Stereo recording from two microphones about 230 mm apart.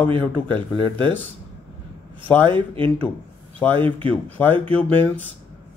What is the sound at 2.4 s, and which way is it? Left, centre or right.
Speech, right.